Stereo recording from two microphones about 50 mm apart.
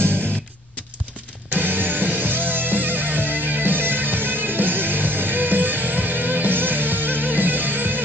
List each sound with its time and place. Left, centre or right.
0.0 s music: right
1.5 s music: right